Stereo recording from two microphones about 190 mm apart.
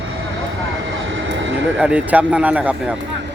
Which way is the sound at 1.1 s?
80° right.